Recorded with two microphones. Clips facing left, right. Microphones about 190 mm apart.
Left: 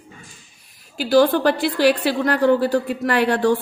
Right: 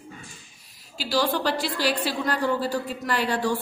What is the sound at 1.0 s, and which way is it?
A woman's voice, 55° left (ahead or behind).